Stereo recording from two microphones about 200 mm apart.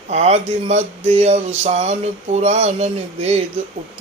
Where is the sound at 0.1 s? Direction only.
35° right (ahead or behind).